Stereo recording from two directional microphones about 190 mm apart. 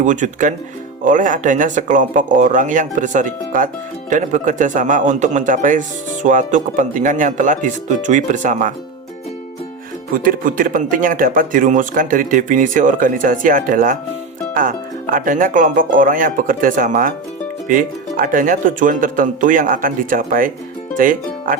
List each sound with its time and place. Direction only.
0.0 s a man's voice: 40° right (ahead or behind)
10.1 s speech: 45° right (ahead or behind)